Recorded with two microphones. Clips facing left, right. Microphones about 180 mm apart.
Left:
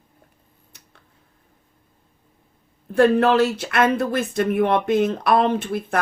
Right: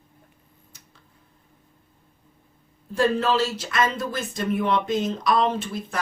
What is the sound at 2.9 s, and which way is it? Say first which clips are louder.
Speech: left 6 dB; 60° left (ahead or behind).